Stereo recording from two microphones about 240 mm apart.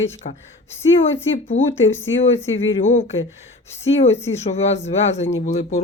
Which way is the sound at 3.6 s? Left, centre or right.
Left.